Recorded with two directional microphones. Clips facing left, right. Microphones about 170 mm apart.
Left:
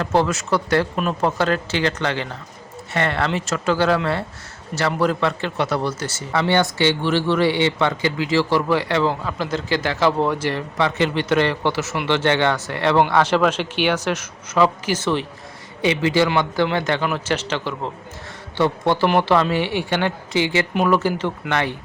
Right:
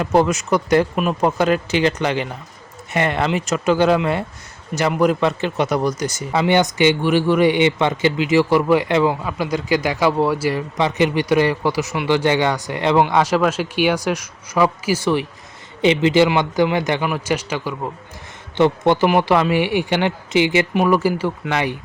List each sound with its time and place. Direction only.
0.0 s a man's voice: 15° right (ahead or behind)
15.8 s a man's voice: 20° right (ahead or behind)